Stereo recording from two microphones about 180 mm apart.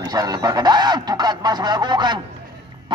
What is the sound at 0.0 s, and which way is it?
Speech, 20° right (ahead or behind).